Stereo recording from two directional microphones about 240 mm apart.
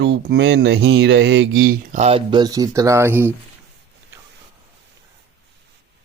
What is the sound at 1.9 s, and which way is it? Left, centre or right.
Speech, right.